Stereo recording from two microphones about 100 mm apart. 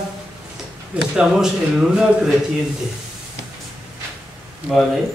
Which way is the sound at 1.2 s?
5° right (ahead or behind).